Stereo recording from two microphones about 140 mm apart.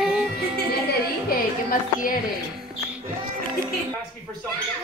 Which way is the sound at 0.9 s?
90° left.